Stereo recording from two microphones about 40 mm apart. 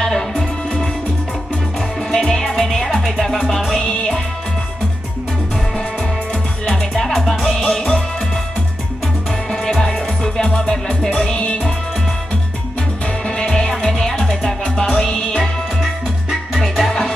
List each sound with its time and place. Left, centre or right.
0.0 s music: centre
2.0 s music: centre
7.2 s music: centre
7.7 s music: centre
9.5 s music: centre
13.4 s music: centre
16.5 s music: centre